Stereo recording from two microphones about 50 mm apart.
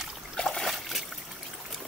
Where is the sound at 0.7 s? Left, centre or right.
Centre.